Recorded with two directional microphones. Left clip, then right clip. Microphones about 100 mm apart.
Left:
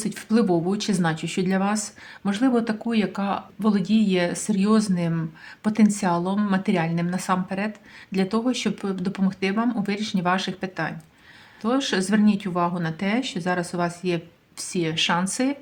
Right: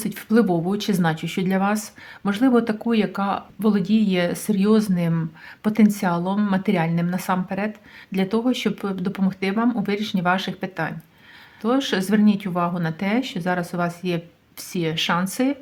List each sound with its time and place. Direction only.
0.0 s speech: 30° right (ahead or behind)